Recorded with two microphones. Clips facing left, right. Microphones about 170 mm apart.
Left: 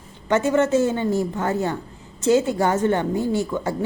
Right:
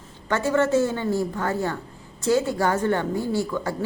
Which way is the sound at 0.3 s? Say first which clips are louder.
Left 3 dB; 20° left (ahead or behind).